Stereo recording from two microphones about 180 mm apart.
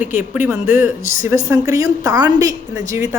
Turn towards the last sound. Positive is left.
turn(degrees=-15)  # may be behind; listen again after turning